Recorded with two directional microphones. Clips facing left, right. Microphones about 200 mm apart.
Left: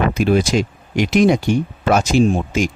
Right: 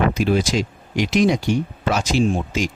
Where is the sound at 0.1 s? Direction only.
55° left (ahead or behind).